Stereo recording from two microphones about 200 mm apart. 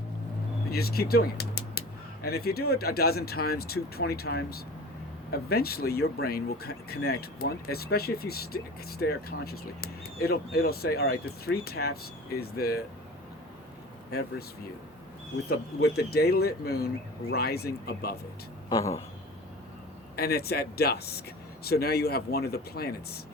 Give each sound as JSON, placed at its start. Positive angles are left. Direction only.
{"t": 0.7, "sound": "speech", "side_deg": 50}
{"t": 14.1, "sound": "speech", "side_deg": 50}
{"t": 15.4, "sound": "speech", "side_deg": 50}
{"t": 18.7, "sound": "speech", "side_deg": 15}
{"t": 20.1, "sound": "speech", "side_deg": 50}